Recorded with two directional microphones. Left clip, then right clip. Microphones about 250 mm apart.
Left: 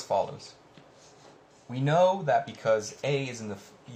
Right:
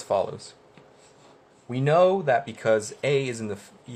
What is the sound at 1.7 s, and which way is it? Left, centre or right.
Speech, right.